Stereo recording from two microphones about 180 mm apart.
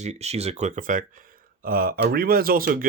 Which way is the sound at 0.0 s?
40° right (ahead or behind).